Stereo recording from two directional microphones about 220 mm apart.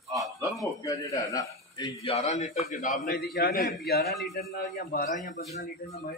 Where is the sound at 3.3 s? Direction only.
45° left (ahead or behind).